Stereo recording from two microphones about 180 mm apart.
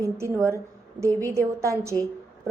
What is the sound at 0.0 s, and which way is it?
A woman's voice, 15° right (ahead or behind).